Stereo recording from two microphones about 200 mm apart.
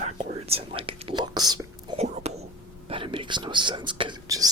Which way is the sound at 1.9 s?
30° right (ahead or behind).